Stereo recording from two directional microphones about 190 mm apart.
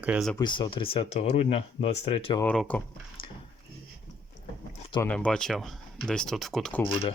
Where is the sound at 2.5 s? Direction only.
5° left (ahead or behind).